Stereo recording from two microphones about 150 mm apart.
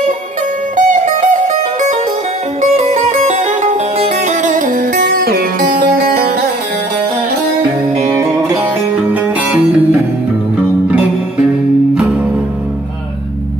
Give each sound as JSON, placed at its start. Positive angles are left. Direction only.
{"t": 0.7, "sound": "music", "side_deg": -55}
{"t": 8.1, "sound": "music", "side_deg": -20}
{"t": 9.1, "sound": "music", "side_deg": -10}